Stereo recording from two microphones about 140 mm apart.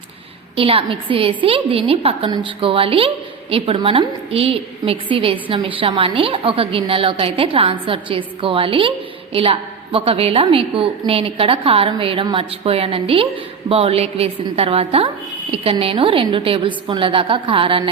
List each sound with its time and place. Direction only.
0.5 s a woman's voice: 40° right (ahead or behind)